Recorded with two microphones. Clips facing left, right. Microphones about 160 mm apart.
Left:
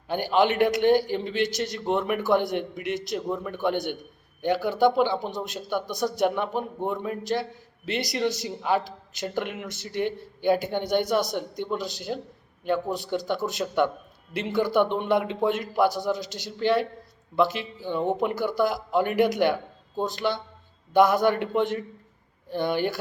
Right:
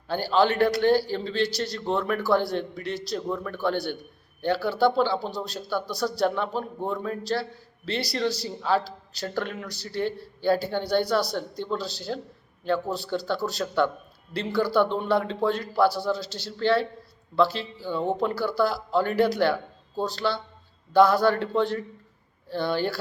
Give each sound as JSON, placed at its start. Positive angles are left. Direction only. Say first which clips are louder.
{"t": 0.1, "sound": "a man's voice", "louder": "even", "side_deg": 20}